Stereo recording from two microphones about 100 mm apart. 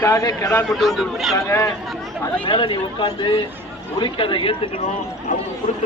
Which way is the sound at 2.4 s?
55° left (ahead or behind).